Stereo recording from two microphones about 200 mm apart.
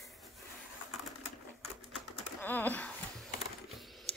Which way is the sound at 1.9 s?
10° left (ahead or behind).